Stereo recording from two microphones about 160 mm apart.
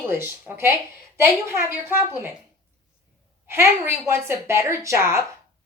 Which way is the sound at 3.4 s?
15° right (ahead or behind).